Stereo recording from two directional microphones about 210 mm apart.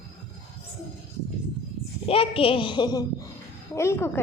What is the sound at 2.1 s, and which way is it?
A woman's voice, 25° left (ahead or behind).